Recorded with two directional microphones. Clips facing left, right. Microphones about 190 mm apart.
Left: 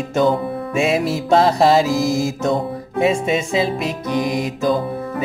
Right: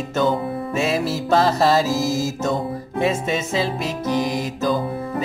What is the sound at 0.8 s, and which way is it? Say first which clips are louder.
Music: left 4 dB; 20° left (ahead or behind).